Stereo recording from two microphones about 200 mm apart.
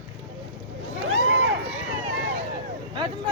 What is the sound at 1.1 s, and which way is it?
Speech, 90° right.